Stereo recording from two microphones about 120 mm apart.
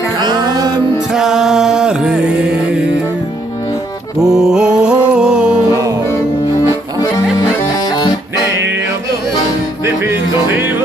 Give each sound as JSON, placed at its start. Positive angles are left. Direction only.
{"t": 0.2, "sound": "music", "side_deg": -35}
{"t": 1.1, "sound": "music", "side_deg": -5}
{"t": 4.2, "sound": "music", "side_deg": -5}
{"t": 9.8, "sound": "music", "side_deg": -20}